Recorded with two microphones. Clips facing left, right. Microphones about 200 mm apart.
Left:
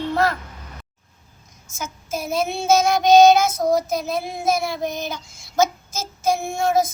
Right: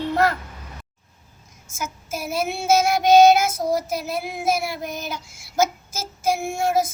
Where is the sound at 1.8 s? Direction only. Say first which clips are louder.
Left 1 dB; 5° right (ahead or behind).